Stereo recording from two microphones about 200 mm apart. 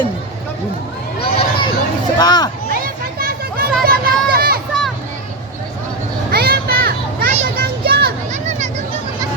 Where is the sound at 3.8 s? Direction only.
50° right (ahead or behind).